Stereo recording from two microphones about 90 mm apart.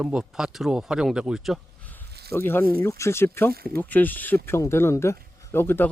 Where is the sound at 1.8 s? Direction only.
20° left (ahead or behind).